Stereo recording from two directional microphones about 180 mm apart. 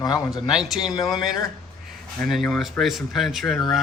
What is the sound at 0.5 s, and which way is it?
Speech, centre (ahead or behind).